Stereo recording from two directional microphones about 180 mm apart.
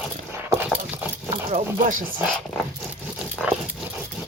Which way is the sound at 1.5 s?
45° right (ahead or behind).